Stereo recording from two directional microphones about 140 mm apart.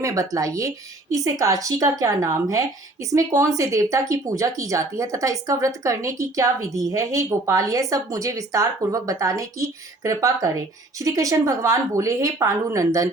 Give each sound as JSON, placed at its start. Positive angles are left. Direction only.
{"t": 0.0, "sound": "speech", "side_deg": -25}